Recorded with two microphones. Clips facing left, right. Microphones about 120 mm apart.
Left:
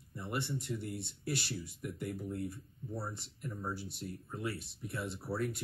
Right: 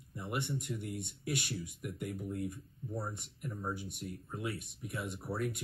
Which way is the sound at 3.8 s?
55° right (ahead or behind).